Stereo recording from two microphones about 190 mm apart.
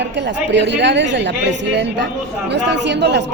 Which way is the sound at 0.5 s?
65° right (ahead or behind).